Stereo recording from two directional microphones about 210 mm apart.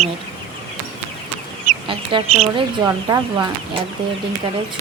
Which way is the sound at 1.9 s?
30° right (ahead or behind).